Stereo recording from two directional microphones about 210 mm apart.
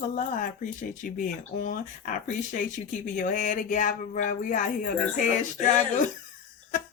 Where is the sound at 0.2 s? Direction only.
40° left (ahead or behind).